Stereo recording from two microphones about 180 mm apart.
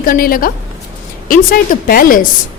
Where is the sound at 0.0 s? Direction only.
55° left (ahead or behind).